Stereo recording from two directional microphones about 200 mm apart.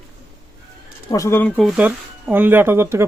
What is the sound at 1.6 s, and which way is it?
Speech, 5° right (ahead or behind).